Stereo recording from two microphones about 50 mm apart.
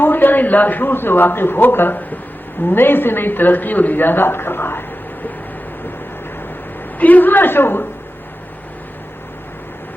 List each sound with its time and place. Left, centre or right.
0.0 s a man's voice: left
7.0 s a man's voice: left